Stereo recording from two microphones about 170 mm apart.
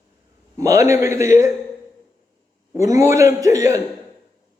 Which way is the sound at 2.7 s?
20° right (ahead or behind).